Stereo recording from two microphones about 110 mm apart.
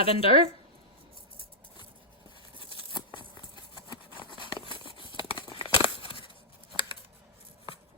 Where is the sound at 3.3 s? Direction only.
40° left (ahead or behind).